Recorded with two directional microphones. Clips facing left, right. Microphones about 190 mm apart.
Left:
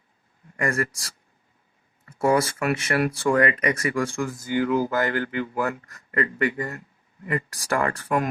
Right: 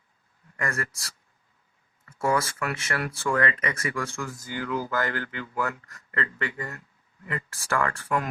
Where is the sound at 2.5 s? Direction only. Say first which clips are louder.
Left 6 dB; 15° left (ahead or behind).